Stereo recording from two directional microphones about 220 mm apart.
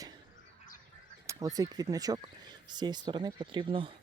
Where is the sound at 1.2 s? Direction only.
15° right (ahead or behind).